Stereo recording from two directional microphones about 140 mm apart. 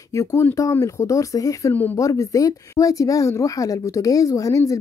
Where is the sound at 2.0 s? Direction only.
25° left (ahead or behind).